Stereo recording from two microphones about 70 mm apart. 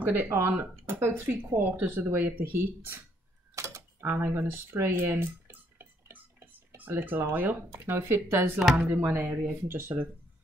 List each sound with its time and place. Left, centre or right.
0.0 s speech: right
3.5 s a sound: right
4.1 s speech: right
7.7 s speech: right
8.5 s speech: centre
9.1 s speech: right